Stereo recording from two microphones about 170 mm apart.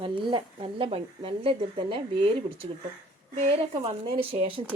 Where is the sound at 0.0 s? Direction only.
30° right (ahead or behind).